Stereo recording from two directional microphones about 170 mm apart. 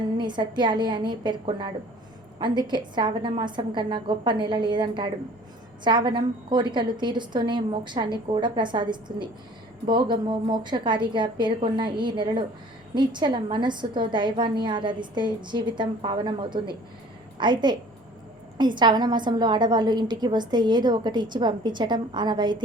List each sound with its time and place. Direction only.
0.2 s a woman's voice: 25° right (ahead or behind)